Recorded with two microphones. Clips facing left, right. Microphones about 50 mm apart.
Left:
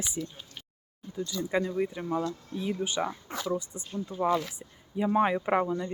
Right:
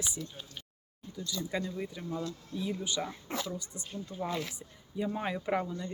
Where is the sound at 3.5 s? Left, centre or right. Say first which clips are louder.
Left 8 dB; left.